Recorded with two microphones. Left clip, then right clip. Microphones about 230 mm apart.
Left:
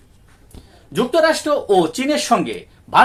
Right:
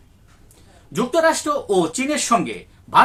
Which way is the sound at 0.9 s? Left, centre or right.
Centre.